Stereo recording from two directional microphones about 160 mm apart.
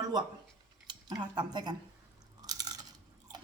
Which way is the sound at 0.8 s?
25° right (ahead or behind).